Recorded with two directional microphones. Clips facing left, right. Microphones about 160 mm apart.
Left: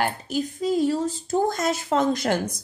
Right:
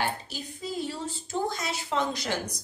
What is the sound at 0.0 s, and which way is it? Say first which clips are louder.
A woman's voice: left 7 dB; 45° left (ahead or behind).